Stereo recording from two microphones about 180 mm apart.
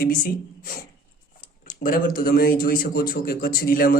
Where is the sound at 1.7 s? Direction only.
50° left (ahead or behind).